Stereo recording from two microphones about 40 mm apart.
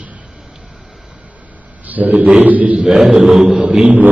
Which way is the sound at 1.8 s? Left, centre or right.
Right.